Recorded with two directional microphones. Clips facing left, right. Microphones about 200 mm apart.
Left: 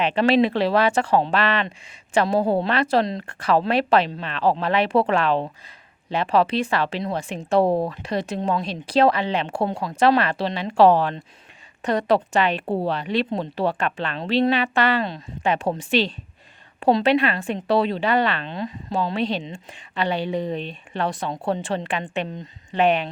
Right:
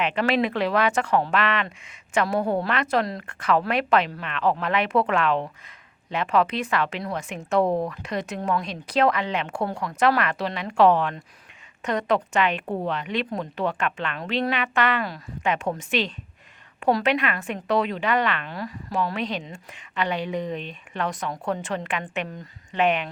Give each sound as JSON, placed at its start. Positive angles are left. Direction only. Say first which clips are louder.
{"t": 0.0, "sound": "speech", "louder": "left 5 dB", "side_deg": 30}